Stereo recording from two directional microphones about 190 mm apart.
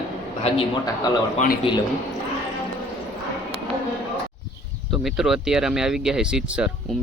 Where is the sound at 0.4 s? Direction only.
35° left (ahead or behind).